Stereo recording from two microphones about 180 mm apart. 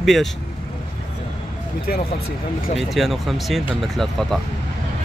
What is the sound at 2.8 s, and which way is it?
Speech, centre (ahead or behind).